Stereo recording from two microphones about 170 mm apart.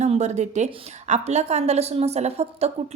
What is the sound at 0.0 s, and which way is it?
A woman's voice, 40° right (ahead or behind).